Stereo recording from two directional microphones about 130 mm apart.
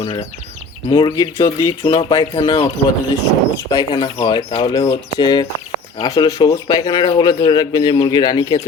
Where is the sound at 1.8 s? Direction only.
40° left (ahead or behind).